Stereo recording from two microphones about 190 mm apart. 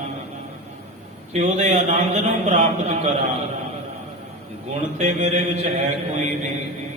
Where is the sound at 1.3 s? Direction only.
35° right (ahead or behind).